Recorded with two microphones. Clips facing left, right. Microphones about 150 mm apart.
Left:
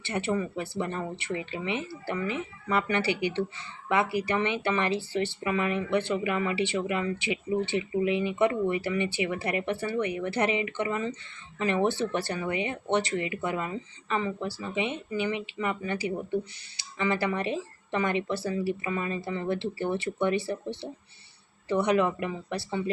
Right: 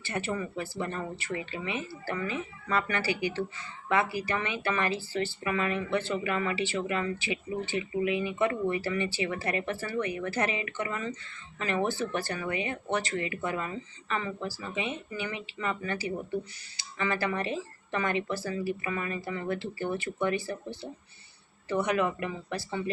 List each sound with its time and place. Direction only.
0.0 s speech: 20° left (ahead or behind)